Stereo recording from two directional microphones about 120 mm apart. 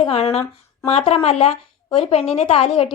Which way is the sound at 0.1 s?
55° left (ahead or behind).